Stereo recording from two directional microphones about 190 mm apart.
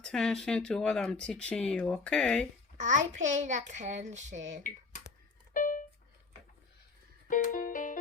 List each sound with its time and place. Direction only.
0.0 s speech: 5° left (ahead or behind)
2.7 s child singing: 40° right (ahead or behind)
5.5 s a sound: 45° left (ahead or behind)
7.3 s music: 45° left (ahead or behind)